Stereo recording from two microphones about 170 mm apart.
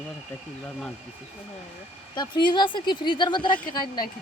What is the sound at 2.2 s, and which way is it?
Speech, 25° left (ahead or behind).